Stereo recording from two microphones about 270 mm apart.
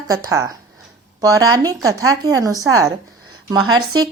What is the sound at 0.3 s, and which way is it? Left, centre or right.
Speech, centre.